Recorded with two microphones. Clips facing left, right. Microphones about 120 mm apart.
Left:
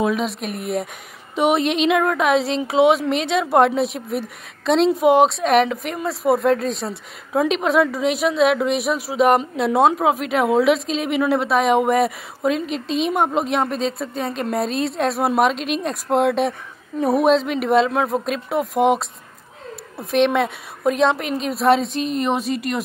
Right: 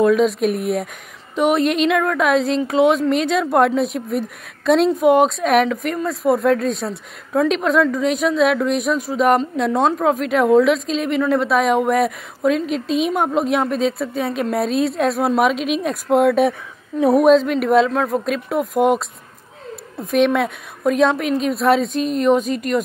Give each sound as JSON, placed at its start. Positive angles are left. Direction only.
{"t": 0.0, "sound": "speech", "side_deg": 0}